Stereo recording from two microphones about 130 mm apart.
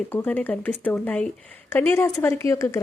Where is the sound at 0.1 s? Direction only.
15° left (ahead or behind).